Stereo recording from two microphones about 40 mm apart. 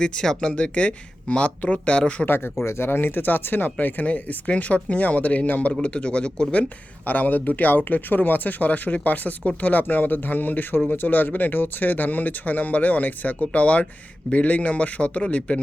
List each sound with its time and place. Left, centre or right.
0.0 s speech: centre
2.2 s a man's voice: left
7.0 s a man's voice: left